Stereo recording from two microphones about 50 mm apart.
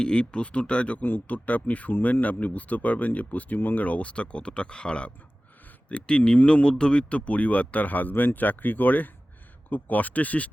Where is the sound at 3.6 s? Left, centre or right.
Left.